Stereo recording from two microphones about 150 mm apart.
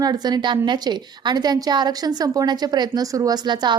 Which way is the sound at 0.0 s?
25° right (ahead or behind).